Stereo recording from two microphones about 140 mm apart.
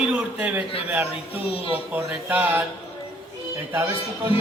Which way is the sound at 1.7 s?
15° right (ahead or behind).